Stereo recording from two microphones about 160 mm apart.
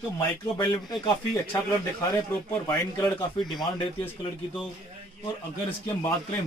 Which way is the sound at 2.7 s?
20° left (ahead or behind).